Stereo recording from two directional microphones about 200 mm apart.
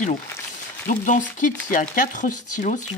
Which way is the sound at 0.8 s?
40° left (ahead or behind).